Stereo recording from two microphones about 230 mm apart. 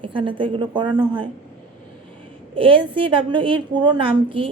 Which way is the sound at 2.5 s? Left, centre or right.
Right.